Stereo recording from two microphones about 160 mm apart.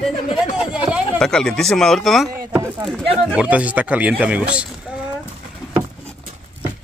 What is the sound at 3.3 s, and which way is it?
Speech, 5° right (ahead or behind).